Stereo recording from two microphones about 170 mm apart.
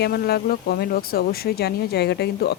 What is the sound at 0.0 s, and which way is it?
Speech, 70° left (ahead or behind).